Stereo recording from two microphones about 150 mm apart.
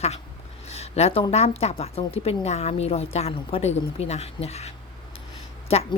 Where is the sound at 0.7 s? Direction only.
45° left (ahead or behind).